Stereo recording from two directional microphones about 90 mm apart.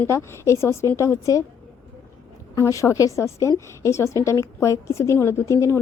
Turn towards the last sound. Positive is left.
turn(degrees=35)  # may be behind; listen again after turning